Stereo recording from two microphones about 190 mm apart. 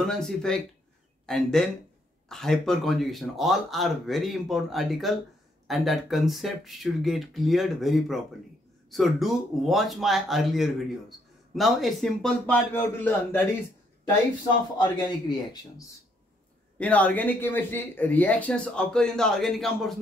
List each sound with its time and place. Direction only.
0.0 s speech: 5° left (ahead or behind)
14.8 s a man's voice: 20° left (ahead or behind)
16.7 s speech: 5° left (ahead or behind)